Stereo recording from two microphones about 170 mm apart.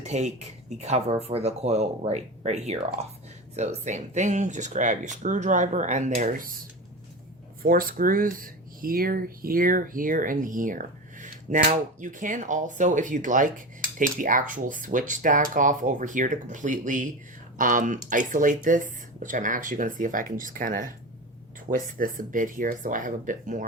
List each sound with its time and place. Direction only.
0.0 s speech: 40° right (ahead or behind)
7.6 s speech: 55° right (ahead or behind)